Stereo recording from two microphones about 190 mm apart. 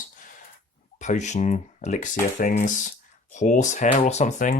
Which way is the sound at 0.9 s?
40° left (ahead or behind).